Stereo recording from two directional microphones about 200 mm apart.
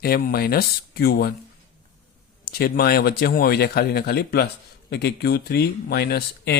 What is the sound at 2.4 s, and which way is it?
Speech, 50° left (ahead or behind).